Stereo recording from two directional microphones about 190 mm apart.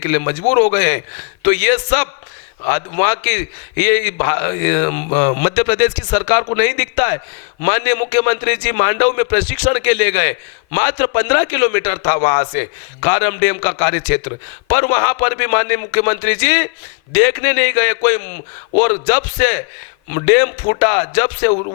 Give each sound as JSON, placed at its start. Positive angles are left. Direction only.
{"t": 0.0, "sound": "a man's voice", "side_deg": 15}